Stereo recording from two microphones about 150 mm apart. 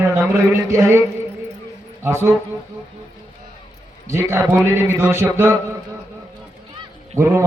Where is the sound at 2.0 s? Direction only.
15° right (ahead or behind).